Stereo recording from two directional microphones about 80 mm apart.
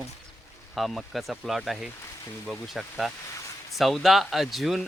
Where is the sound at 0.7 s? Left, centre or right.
Centre.